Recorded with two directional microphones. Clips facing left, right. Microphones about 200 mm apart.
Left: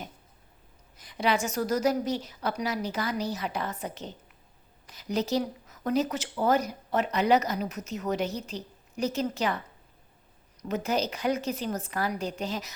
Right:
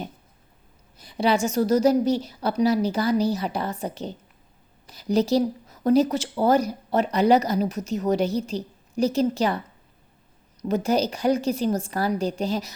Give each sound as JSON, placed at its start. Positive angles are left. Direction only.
{"t": 0.9, "sound": "speech", "side_deg": -30}
{"t": 10.8, "sound": "speech", "side_deg": -35}